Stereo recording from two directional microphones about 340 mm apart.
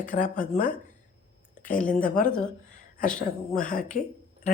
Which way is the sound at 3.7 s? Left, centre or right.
Left.